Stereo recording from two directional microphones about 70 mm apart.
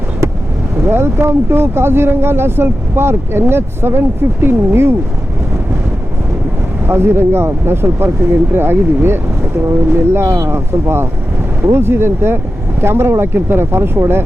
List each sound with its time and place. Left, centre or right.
0.9 s speech: right
6.8 s speech: right